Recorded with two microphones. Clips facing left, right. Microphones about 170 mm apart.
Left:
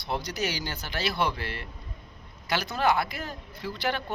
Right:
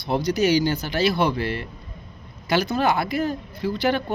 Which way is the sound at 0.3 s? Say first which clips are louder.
Right 13 dB; 10° right (ahead or behind).